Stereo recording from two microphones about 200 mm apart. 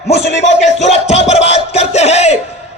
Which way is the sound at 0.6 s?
35° left (ahead or behind).